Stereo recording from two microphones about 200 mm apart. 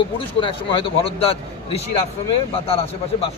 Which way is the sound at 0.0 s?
25° left (ahead or behind).